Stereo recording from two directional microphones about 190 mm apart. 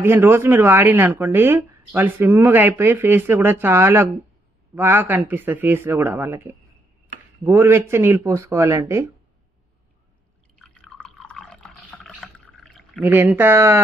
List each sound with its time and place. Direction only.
0.0 s speech: 10° right (ahead or behind)
10.6 s drip: 5° left (ahead or behind)
12.4 s pour: centre (ahead or behind)
13.0 s speech: 10° right (ahead or behind)